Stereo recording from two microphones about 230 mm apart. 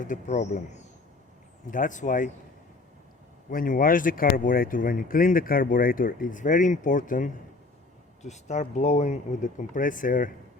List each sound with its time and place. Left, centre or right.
0.0 s speech: left
3.5 s speech: left